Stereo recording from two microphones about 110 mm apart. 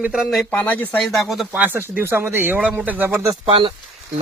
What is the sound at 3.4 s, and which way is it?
Speech, 55° right (ahead or behind).